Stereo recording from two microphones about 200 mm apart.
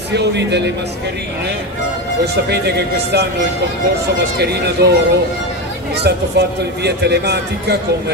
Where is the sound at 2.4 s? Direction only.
55° right (ahead or behind).